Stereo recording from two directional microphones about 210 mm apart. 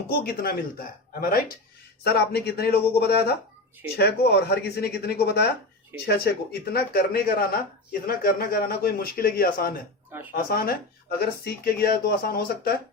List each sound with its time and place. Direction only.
0.1 s a man's voice: 45° left (ahead or behind)
2.0 s a man's voice: 50° left (ahead or behind)